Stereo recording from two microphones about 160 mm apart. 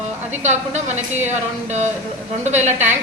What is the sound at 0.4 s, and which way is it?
A woman's voice, 45° right (ahead or behind).